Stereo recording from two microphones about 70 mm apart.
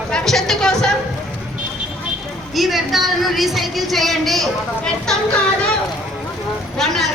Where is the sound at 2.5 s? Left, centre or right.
Centre.